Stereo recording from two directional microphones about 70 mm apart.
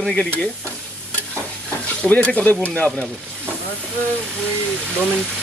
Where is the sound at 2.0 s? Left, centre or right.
Centre.